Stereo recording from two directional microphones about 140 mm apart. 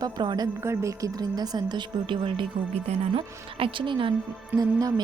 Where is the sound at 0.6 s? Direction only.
20° right (ahead or behind); by 4.1 s 35° right (ahead or behind).